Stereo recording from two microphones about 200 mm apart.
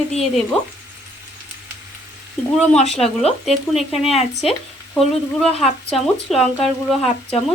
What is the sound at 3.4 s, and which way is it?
Speech, centre (ahead or behind).